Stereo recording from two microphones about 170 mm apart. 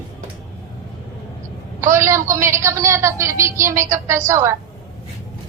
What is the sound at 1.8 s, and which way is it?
A woman's voice, 15° right (ahead or behind).